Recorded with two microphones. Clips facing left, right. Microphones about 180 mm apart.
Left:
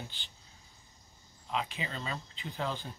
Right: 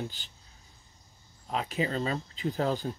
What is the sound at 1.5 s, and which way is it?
Speech, 40° right (ahead or behind).